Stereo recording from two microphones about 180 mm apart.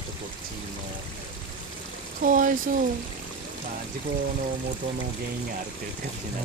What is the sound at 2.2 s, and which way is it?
Speech, 50° right (ahead or behind).